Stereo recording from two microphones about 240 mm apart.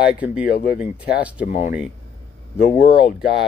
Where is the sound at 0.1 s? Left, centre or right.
Centre.